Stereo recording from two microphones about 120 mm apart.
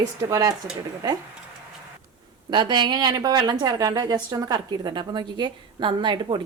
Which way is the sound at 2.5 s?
40° right (ahead or behind).